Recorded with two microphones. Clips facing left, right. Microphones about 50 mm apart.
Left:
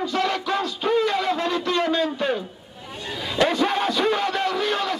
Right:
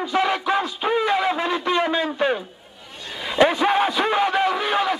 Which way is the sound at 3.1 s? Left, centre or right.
Centre.